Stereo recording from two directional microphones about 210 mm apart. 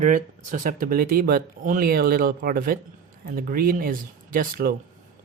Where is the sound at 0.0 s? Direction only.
40° right (ahead or behind).